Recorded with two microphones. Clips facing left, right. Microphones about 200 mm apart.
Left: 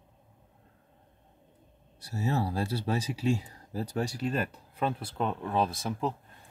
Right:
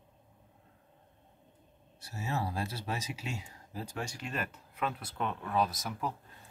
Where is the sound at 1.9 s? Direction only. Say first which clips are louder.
Left 6 dB; 35° left (ahead or behind).